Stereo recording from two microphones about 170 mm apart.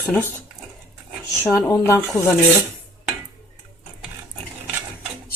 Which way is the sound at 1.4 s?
15° left (ahead or behind).